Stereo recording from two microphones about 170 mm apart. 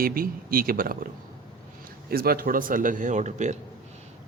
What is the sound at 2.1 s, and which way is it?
A man's voice, 60° right (ahead or behind).